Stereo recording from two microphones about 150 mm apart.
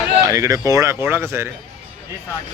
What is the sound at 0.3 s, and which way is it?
Speech, 20° right (ahead or behind).